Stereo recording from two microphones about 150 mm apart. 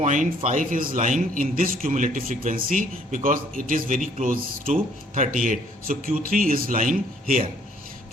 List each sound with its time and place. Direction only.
0.0 s a man's voice: 55° right (ahead or behind)